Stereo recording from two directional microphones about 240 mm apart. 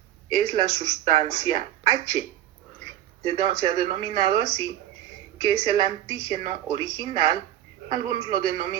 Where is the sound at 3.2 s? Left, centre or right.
Centre.